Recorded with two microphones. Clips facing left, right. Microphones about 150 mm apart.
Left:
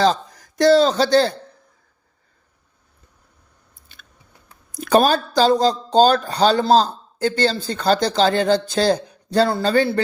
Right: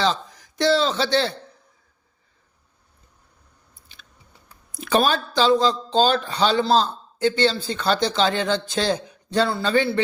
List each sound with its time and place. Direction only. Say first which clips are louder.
0.0 s a man's voice: left 5 dB; 45° left (ahead or behind)
4.7 s speech: left 4 dB; 45° left (ahead or behind)